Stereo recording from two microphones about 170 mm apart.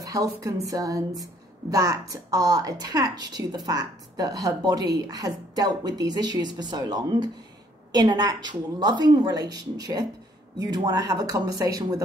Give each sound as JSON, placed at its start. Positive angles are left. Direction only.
{"t": 0.0, "sound": "a woman's voice", "side_deg": -20}